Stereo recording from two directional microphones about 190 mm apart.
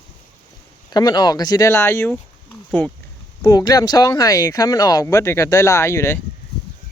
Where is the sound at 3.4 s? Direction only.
20° left (ahead or behind).